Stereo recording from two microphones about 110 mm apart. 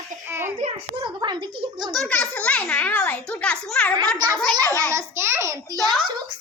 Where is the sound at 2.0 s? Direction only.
15° left (ahead or behind).